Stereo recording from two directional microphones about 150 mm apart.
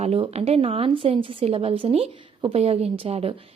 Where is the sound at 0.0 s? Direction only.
40° right (ahead or behind).